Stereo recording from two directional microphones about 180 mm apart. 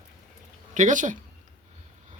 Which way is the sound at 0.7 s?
45° right (ahead or behind).